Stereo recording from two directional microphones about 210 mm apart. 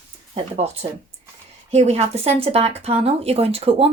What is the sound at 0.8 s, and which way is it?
Speech, 30° right (ahead or behind).